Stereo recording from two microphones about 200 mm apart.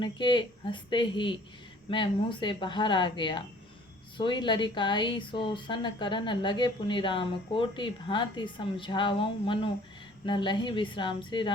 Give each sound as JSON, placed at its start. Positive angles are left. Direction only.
{"t": 0.0, "sound": "speech", "side_deg": 20}